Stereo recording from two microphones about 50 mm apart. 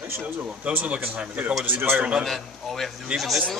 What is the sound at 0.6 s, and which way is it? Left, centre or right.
A man's voice, right.